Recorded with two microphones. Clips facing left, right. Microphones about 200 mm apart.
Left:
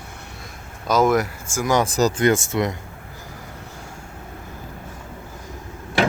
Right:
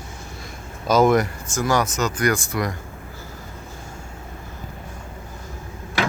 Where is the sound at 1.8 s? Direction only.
30° left (ahead or behind).